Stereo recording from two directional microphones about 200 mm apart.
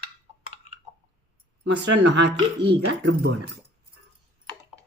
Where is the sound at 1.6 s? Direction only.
60° right (ahead or behind).